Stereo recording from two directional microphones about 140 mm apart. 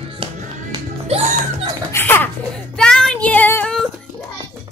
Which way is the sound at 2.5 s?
5° left (ahead or behind).